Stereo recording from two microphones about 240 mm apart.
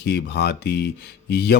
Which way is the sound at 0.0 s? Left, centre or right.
Left.